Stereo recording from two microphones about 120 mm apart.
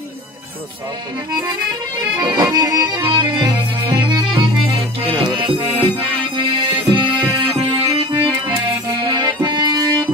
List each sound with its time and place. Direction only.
1.4 s music: 35° right (ahead or behind)
7.2 s music: 25° right (ahead or behind)
7.6 s music: 45° right (ahead or behind)
8.5 s accordion: 35° right (ahead or behind)